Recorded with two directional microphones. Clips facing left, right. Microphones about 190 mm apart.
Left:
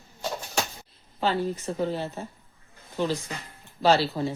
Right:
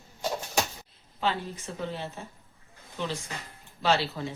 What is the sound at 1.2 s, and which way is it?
Speech, 40° left (ahead or behind).